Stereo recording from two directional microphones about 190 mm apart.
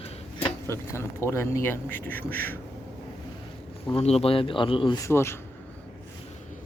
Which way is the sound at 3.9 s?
35° left (ahead or behind).